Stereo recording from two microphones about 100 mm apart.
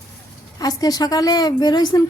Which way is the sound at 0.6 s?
40° left (ahead or behind).